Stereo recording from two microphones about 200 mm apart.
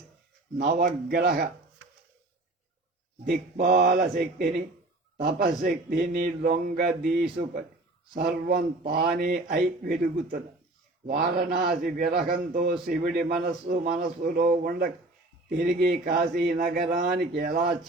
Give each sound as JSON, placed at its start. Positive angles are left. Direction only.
{"t": 0.6, "sound": "a man's voice", "side_deg": -45}
{"t": 3.2, "sound": "a man's voice", "side_deg": -45}